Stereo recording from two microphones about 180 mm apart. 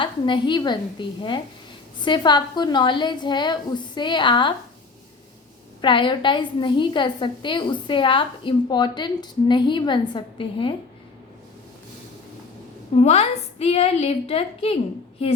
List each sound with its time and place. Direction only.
0.0 s a woman's voice: 25° left (ahead or behind)
5.8 s a woman's voice: 25° left (ahead or behind)
13.0 s a woman's voice: 35° left (ahead or behind)